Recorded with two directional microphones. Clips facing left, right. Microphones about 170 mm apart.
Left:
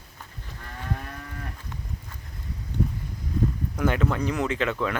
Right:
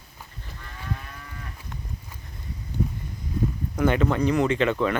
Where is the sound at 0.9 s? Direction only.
50° left (ahead or behind).